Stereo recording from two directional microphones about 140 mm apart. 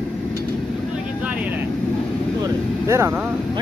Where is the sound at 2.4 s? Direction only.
20° right (ahead or behind).